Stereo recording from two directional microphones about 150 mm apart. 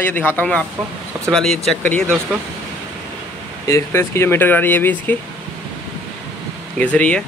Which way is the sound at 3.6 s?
20° left (ahead or behind).